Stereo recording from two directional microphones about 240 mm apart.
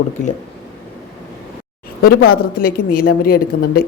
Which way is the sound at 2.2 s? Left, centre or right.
Left.